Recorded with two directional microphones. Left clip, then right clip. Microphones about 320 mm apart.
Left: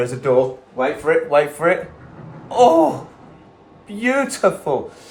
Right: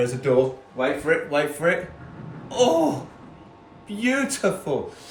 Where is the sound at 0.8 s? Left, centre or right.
Centre.